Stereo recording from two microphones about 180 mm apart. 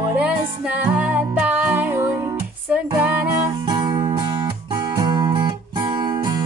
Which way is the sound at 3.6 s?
25° right (ahead or behind).